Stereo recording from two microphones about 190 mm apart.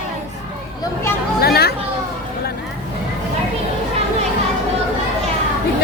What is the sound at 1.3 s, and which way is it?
Speech, 55° left (ahead or behind).